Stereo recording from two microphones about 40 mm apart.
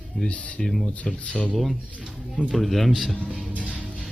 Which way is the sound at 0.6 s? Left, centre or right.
Centre.